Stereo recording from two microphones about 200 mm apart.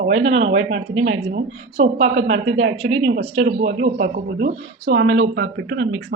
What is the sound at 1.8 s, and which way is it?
A woman's voice, 35° right (ahead or behind).